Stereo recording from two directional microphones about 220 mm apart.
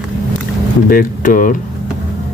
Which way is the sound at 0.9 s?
40° left (ahead or behind).